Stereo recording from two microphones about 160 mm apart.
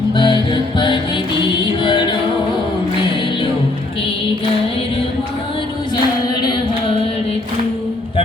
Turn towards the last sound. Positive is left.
turn(degrees=25)  # may be behind; listen again after turning